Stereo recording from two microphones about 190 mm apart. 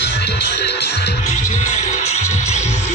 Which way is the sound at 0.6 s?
60° left (ahead or behind).